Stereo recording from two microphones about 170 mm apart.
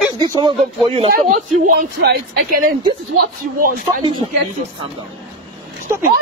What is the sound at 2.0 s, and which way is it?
Speech, 70° right (ahead or behind).